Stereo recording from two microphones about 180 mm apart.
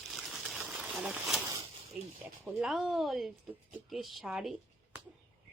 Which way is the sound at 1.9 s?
5° right (ahead or behind).